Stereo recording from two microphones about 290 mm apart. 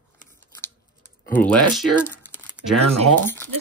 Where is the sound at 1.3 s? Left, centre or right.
Centre.